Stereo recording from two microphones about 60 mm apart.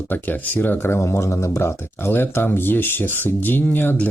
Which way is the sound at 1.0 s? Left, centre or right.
Left.